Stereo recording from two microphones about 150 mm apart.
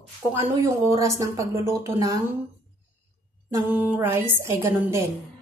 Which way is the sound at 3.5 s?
10° right (ahead or behind).